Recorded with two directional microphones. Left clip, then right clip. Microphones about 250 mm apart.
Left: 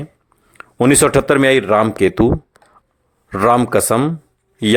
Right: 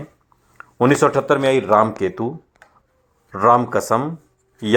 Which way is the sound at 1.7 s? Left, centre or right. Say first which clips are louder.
Left 2 dB; left.